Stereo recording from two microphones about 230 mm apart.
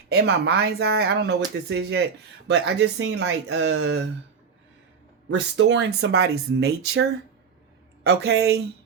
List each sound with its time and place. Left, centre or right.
0.1 s speech: right
5.3 s speech: right